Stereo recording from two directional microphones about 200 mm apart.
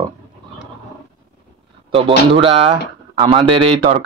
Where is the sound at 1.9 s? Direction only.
25° right (ahead or behind).